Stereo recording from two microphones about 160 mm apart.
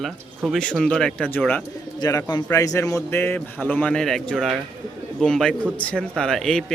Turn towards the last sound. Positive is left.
turn(degrees=0)  # may be behind; listen again after turning